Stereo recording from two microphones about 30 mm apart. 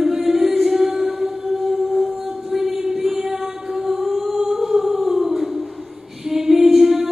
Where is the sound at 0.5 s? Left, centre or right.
Centre.